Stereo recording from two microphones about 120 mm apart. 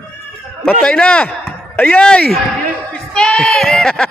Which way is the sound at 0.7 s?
5° left (ahead or behind).